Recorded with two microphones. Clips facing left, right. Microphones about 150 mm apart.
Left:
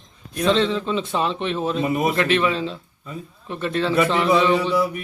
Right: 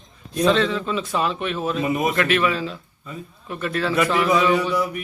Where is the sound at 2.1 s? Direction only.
30° left (ahead or behind).